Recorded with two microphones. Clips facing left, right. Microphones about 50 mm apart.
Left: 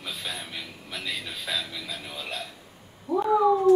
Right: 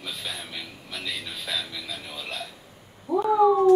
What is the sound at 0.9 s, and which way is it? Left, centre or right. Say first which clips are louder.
A man's voice: even; centre.